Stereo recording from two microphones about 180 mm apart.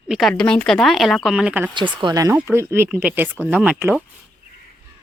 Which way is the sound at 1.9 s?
20° right (ahead or behind).